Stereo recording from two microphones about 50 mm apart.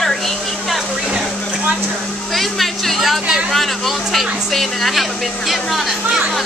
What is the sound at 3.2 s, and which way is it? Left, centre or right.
Speech, centre.